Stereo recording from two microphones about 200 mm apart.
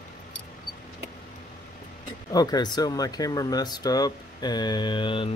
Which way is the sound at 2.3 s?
20° left (ahead or behind).